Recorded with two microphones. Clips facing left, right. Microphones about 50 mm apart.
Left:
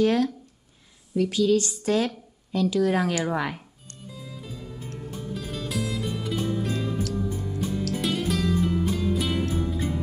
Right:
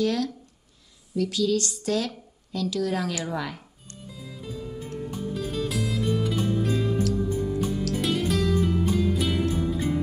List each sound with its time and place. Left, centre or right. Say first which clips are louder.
0.0 s speech: left 4 dB; left
4.1 s music: right 2 dB; centre